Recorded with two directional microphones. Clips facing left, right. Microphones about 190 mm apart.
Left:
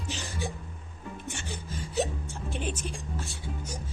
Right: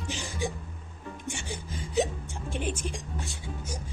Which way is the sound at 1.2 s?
15° right (ahead or behind).